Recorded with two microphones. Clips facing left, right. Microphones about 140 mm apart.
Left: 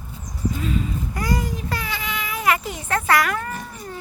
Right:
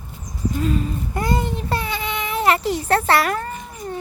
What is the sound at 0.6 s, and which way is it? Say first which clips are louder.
Speech: right 5 dB; 45° right (ahead or behind).